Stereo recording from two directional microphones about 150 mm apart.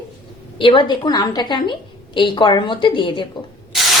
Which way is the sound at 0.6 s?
35° left (ahead or behind).